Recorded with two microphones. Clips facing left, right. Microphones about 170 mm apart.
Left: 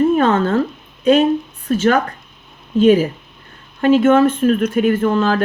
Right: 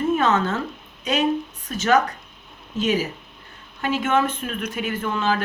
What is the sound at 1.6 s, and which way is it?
Speech, 50° left (ahead or behind).